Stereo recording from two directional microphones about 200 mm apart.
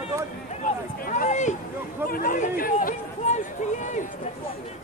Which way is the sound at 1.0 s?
40° left (ahead or behind).